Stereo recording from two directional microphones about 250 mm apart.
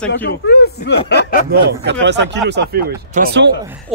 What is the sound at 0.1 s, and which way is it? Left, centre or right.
Speech, left.